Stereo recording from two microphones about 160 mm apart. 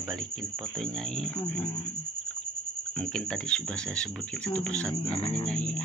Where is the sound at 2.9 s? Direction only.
5° left (ahead or behind).